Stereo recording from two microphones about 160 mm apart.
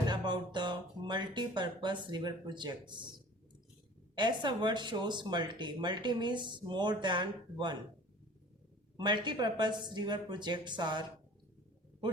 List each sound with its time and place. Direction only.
0.1 s speech: 30° right (ahead or behind)
4.1 s speech: 30° right (ahead or behind)
9.0 s speech: 30° right (ahead or behind)